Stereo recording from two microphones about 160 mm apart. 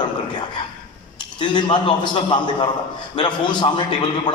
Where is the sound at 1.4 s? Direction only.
30° left (ahead or behind).